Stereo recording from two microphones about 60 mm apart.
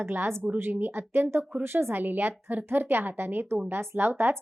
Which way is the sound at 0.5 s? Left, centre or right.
Right.